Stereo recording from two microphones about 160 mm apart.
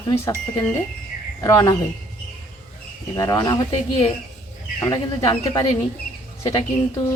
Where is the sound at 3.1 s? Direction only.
25° left (ahead or behind).